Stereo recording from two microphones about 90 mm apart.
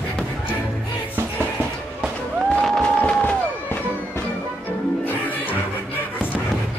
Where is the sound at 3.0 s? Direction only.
15° left (ahead or behind).